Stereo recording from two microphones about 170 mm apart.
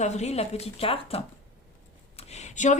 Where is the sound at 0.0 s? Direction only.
40° left (ahead or behind).